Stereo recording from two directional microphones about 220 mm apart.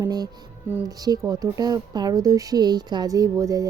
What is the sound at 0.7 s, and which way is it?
Speech, 15° right (ahead or behind).